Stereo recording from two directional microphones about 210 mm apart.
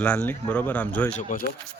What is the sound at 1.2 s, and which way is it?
Speech, 40° left (ahead or behind).